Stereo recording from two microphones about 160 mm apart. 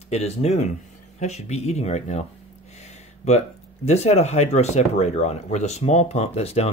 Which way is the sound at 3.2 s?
40° left (ahead or behind).